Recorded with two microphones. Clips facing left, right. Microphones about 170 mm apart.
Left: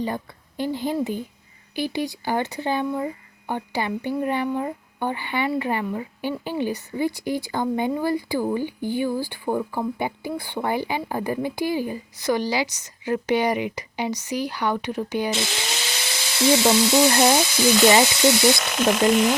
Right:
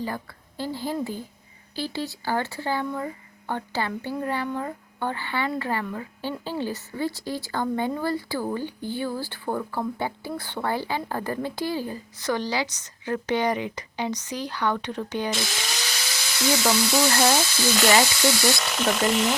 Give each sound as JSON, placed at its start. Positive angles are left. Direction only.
{"t": 0.0, "sound": "a woman's voice", "side_deg": 20}
{"t": 15.3, "sound": "speech", "side_deg": 20}
{"t": 18.9, "sound": "speech", "side_deg": 0}